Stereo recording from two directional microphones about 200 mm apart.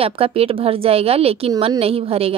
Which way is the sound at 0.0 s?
30° right (ahead or behind).